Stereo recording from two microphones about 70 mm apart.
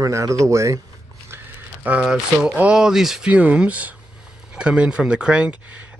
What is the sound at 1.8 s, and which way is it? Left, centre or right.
Speech, right.